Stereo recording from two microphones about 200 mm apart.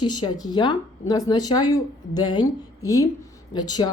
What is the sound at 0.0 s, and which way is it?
A woman's voice, 20° left (ahead or behind).